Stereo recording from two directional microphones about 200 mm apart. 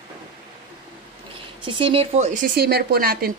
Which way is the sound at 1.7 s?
25° right (ahead or behind).